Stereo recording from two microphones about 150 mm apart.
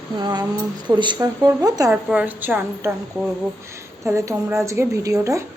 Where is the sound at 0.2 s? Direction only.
30° right (ahead or behind).